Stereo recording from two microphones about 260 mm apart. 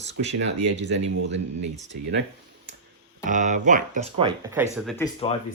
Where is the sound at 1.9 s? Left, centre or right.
Right.